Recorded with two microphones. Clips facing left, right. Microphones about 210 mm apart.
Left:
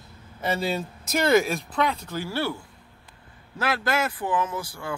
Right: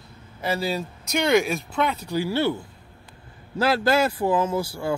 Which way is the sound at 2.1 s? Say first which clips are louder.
Right 5 dB; 15° right (ahead or behind).